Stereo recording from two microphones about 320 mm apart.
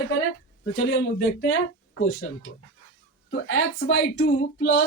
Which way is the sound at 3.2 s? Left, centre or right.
Left.